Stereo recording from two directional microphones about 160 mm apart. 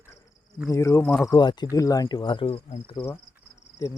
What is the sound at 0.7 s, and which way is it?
Speech, 20° left (ahead or behind).